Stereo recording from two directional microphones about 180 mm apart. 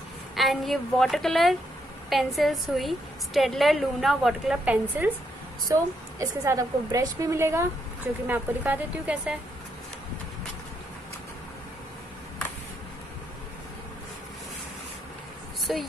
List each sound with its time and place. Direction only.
0.4 s a woman's voice: centre (ahead or behind)
6.1 s a woman's voice: 15° right (ahead or behind)
15.6 s speech: centre (ahead or behind)